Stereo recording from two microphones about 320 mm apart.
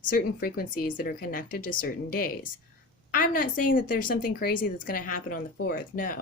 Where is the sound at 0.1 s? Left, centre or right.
Left.